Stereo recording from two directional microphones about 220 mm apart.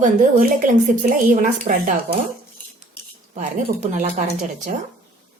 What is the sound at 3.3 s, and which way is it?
Speech, 35° right (ahead or behind).